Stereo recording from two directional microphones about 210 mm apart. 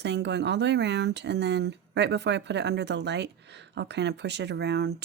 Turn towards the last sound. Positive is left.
turn(degrees=-50)  # may be behind; listen again after turning